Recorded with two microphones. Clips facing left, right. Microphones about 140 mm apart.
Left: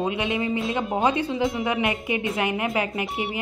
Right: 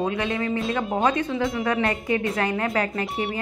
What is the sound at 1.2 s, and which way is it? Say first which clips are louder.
Speech: even; 25° left (ahead or behind).